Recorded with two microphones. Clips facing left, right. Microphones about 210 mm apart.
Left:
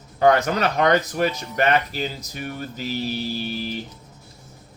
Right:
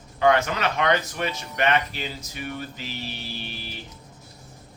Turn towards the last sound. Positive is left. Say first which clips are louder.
# left 9 dB
turn(degrees=40)  # may be behind; listen again after turning